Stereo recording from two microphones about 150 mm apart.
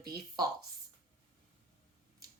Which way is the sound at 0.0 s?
90° right.